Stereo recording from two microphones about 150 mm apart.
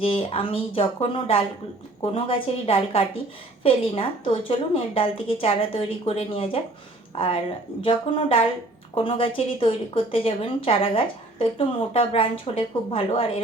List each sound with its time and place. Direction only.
0.0 s a woman's voice: 40° left (ahead or behind)
7.8 s a woman's voice: 35° left (ahead or behind)